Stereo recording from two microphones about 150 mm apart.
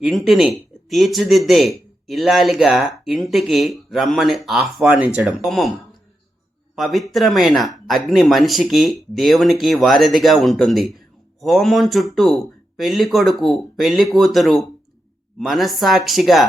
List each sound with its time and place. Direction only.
0.0 s speech: centre (ahead or behind)
6.7 s speech: centre (ahead or behind)